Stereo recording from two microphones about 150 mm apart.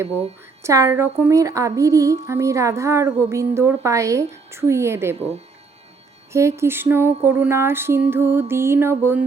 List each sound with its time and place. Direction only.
0.6 s a woman's voice: 20° right (ahead or behind)
6.6 s speech: 15° right (ahead or behind)